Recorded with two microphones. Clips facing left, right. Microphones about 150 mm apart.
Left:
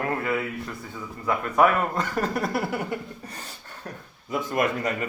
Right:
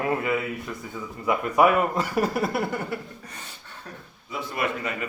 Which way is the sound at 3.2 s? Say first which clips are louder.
Left 3 dB; 35° left (ahead or behind).